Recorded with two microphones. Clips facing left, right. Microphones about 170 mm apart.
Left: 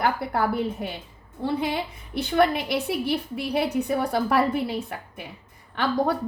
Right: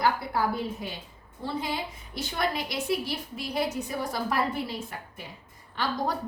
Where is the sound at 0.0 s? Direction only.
55° left (ahead or behind).